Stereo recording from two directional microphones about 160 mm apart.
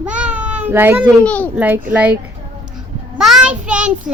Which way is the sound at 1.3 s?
10° left (ahead or behind).